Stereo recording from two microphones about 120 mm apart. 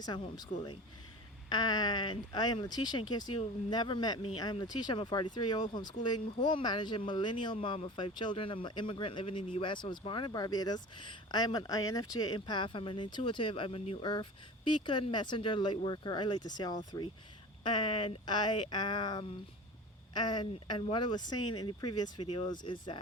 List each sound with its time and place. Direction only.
0.0 s speech: 35° left (ahead or behind)